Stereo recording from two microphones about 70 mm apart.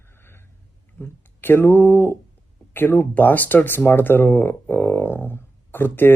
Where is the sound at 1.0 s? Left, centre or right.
Left.